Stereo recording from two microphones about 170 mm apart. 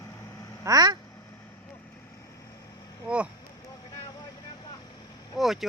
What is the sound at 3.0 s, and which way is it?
Speech, 5° right (ahead or behind).